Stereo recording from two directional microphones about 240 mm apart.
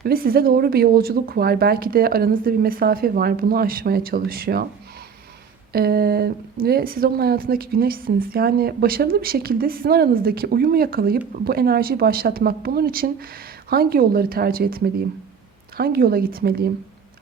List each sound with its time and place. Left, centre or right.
0.0 s a woman's voice: right
5.7 s a woman's voice: right